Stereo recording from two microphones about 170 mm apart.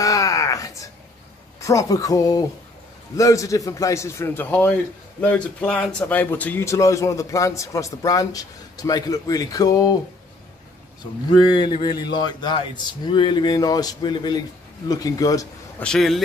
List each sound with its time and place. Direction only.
0.0 s a sound: 20° left (ahead or behind)
1.6 s a man's voice: 20° left (ahead or behind)
11.3 s speech: 25° left (ahead or behind)
15.8 s speech: centre (ahead or behind)